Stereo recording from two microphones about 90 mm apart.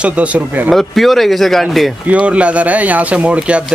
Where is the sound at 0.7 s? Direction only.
Centre (ahead or behind).